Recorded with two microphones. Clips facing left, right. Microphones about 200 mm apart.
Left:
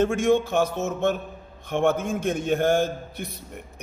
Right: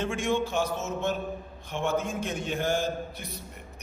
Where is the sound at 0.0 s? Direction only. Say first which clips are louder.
Left 7 dB; 45° left (ahead or behind).